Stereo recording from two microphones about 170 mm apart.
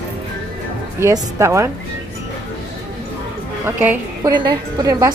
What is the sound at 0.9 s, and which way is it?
Speech, 15° right (ahead or behind).